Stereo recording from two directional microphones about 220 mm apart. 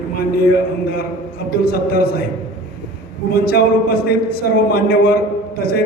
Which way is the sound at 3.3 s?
45° left (ahead or behind).